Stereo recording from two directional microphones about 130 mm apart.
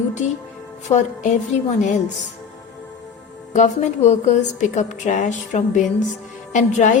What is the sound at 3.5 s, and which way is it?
A woman's voice, 60° left (ahead or behind).